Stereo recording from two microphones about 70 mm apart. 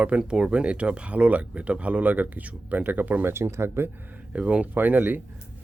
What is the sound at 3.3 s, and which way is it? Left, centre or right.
Speech, right.